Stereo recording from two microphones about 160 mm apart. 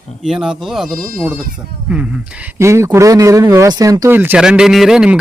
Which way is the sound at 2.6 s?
15° right (ahead or behind).